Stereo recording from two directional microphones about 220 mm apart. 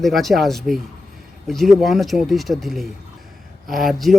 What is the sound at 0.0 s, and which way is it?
Speech, centre (ahead or behind).